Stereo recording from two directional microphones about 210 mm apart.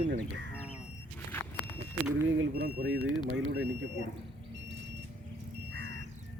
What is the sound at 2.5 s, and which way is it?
Speech, 50° right (ahead or behind).